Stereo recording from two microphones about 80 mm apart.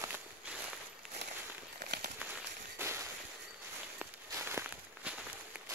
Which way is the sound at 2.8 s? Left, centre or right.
Right.